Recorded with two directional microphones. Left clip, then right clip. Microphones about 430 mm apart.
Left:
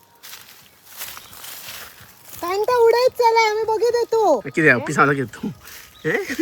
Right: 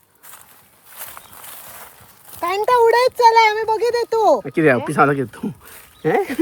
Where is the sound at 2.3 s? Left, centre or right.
Centre.